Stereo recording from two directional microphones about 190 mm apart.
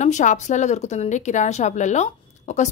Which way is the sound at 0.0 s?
40° left (ahead or behind).